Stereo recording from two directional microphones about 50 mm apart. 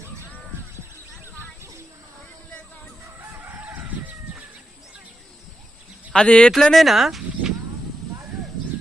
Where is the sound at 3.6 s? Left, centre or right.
Right.